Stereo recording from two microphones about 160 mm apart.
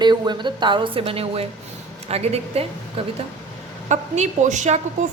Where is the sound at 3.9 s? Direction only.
50° right (ahead or behind).